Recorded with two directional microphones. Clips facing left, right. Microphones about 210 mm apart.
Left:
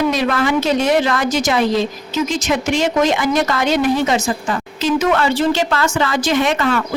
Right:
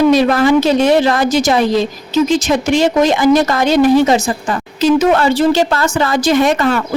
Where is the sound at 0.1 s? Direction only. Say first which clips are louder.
Right 7 dB; 35° right (ahead or behind).